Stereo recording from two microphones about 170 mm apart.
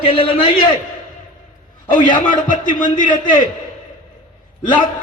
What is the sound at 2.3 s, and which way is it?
Speech, 50° left (ahead or behind).